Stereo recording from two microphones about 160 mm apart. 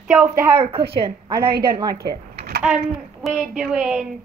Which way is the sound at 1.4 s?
80° right.